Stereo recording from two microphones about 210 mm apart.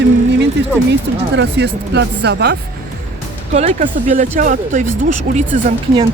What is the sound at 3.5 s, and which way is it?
Speech, 35° right (ahead or behind).